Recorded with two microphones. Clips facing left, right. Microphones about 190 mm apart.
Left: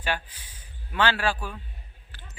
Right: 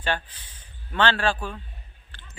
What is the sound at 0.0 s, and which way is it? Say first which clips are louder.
A man's voice: right 2 dB; 10° left (ahead or behind).